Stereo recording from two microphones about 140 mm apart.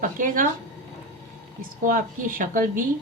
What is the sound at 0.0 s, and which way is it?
Speech, 75° right (ahead or behind).